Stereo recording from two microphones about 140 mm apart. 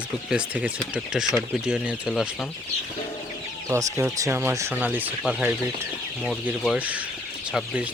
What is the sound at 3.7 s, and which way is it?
Speech, 20° right (ahead or behind).